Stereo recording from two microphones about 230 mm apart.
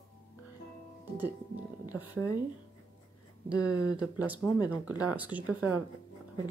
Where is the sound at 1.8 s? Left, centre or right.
Centre.